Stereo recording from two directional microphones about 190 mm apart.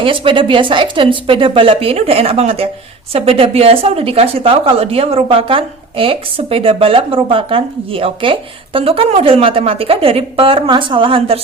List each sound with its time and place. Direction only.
0.0 s speech: 25° right (ahead or behind)